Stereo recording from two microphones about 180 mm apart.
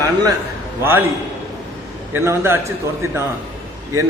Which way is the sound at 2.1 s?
15° right (ahead or behind).